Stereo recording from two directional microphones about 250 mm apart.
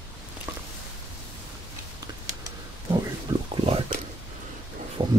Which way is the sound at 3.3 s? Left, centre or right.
Centre.